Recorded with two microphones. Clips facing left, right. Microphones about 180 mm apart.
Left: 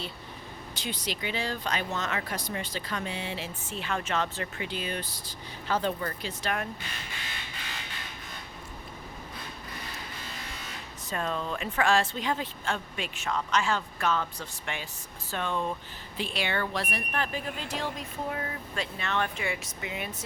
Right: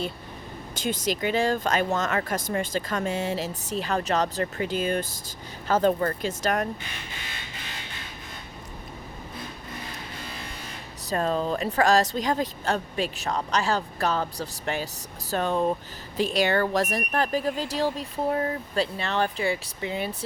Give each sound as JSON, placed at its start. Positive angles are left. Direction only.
{"t": 0.8, "sound": "speech", "side_deg": -45}
{"t": 11.1, "sound": "speech", "side_deg": -35}